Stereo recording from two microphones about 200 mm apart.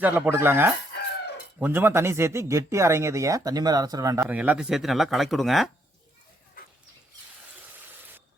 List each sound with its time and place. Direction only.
0.0 s speech: 10° right (ahead or behind)